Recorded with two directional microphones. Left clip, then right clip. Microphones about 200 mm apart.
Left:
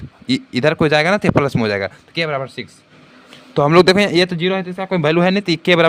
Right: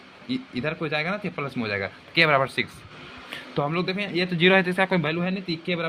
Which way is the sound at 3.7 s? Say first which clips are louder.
Left 15 dB; 50° left (ahead or behind).